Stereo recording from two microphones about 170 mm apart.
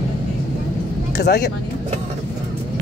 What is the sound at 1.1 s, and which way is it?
Speech, 80° left.